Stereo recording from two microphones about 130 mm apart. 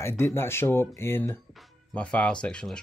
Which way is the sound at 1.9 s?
10° left (ahead or behind).